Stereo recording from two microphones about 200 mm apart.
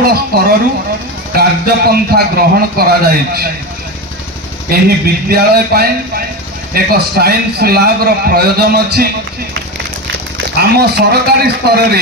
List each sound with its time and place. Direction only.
0.0 s a man's voice: 50° right (ahead or behind)
4.6 s a man's voice: 50° right (ahead or behind)